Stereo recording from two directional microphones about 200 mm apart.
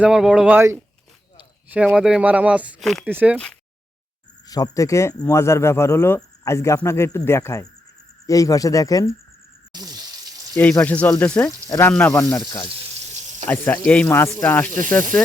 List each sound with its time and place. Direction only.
0.0 s speech: centre (ahead or behind)
3.3 s speech: 5° left (ahead or behind)
4.4 s speech: 20° left (ahead or behind)
9.7 s water: 20° right (ahead or behind)
10.5 s speech: 5° left (ahead or behind)
13.5 s speech: 10° left (ahead or behind)